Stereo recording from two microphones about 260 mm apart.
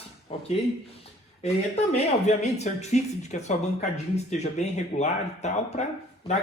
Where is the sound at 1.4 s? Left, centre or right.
Left.